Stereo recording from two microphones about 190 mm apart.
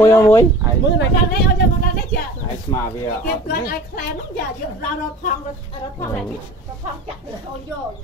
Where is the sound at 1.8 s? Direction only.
50° left (ahead or behind).